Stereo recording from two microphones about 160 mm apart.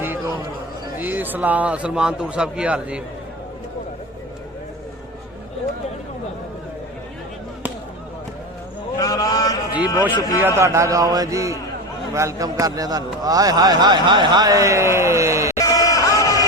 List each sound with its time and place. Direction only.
0.9 s a man's voice: 10° right (ahead or behind)
9.0 s a sound: 20° left (ahead or behind)
10.2 s a man's voice: 20° left (ahead or behind)
10.4 s a man's voice: 15° right (ahead or behind)
15.5 s crowd: 20° left (ahead or behind)